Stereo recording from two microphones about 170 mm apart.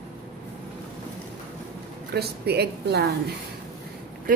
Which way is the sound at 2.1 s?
70° right (ahead or behind).